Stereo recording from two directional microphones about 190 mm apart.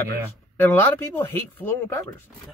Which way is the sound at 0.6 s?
10° left (ahead or behind).